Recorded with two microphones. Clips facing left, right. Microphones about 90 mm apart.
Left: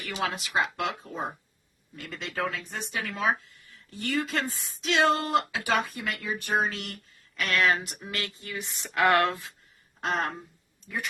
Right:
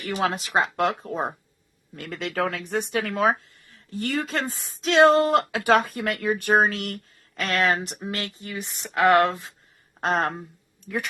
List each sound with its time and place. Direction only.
0.1 s speech: 35° right (ahead or behind)
2.0 s speech: 60° right (ahead or behind)
3.7 s speech: 40° right (ahead or behind)
7.3 s speech: 40° right (ahead or behind)
8.4 s speech: 20° right (ahead or behind)
10.0 s speech: 45° right (ahead or behind)
10.8 s speech: 65° right (ahead or behind)